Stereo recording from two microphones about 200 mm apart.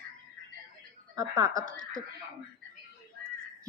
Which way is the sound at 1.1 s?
20° right (ahead or behind).